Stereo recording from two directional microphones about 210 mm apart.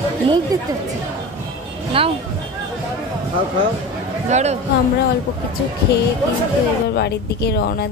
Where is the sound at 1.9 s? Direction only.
25° right (ahead or behind).